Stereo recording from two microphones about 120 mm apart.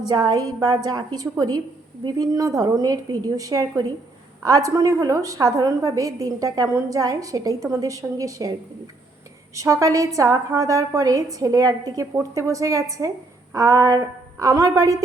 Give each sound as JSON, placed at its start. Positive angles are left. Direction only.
{"t": 0.1, "sound": "a woman's voice", "side_deg": -35}
{"t": 9.6, "sound": "a woman's voice", "side_deg": -25}